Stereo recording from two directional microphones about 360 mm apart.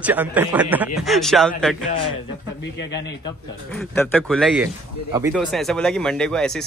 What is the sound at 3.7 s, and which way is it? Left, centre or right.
Speech, centre.